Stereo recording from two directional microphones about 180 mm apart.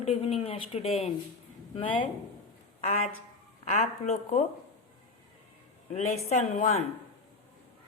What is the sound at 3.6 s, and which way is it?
Speech, 40° left (ahead or behind).